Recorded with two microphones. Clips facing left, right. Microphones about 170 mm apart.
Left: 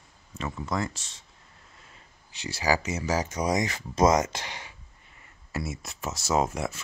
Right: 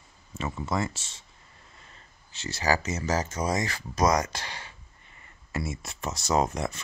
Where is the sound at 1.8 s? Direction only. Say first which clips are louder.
Even; 10° left (ahead or behind).